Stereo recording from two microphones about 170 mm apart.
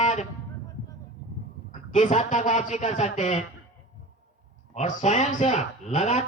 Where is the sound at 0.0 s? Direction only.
40° left (ahead or behind).